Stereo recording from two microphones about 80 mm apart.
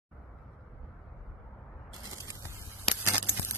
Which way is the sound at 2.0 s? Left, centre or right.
Right.